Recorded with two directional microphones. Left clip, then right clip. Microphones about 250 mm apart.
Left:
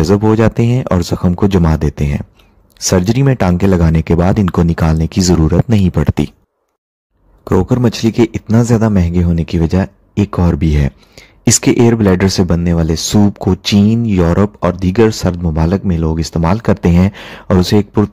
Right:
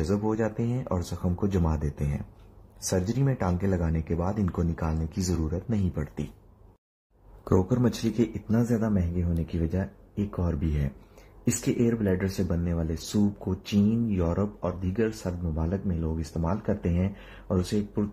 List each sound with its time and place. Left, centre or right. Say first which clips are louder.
0.0 s speech: left 16 dB; left
7.4 s speech: left 12 dB; left